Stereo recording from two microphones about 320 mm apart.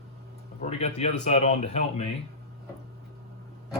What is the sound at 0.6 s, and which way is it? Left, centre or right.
Speech, centre.